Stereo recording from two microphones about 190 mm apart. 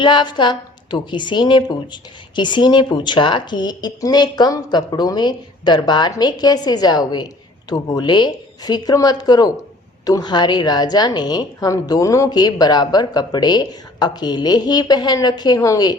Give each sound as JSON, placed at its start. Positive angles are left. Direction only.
{"t": 0.0, "sound": "a woman's voice", "side_deg": 25}